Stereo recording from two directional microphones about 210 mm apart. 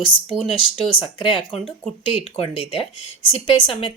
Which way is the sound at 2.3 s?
25° left (ahead or behind).